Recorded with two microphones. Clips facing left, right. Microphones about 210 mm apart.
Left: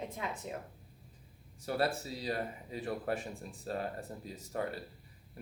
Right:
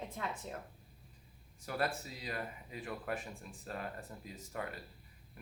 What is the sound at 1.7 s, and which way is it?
Speech, 30° left (ahead or behind).